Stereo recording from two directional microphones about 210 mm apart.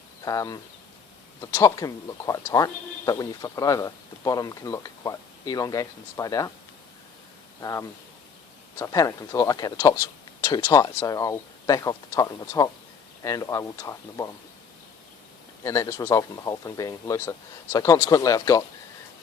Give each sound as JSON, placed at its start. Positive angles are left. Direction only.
{"t": 0.3, "sound": "speech", "side_deg": 15}
{"t": 7.6, "sound": "speech", "side_deg": 15}
{"t": 15.6, "sound": "speech", "side_deg": 15}